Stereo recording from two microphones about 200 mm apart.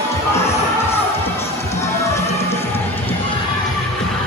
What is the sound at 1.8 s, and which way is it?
Music, 15° left (ahead or behind).